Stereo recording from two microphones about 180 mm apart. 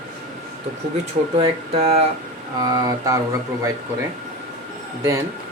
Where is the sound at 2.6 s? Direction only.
20° right (ahead or behind).